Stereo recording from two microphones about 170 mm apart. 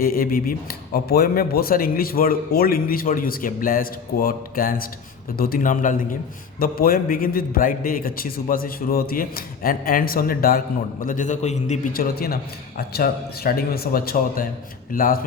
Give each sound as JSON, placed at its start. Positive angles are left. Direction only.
{"t": 0.0, "sound": "a man's voice", "side_deg": 60}
{"t": 11.9, "sound": "a man's voice", "side_deg": 60}